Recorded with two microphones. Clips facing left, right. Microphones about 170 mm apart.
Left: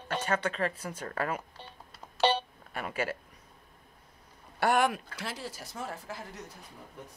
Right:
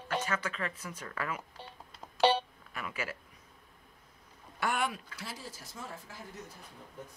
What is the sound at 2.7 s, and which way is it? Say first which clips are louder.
Speech: left 6 dB; 30° left (ahead or behind).